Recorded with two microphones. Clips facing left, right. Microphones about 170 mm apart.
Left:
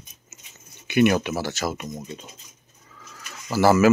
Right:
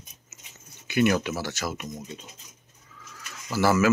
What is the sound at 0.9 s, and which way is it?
Speech, 20° left (ahead or behind).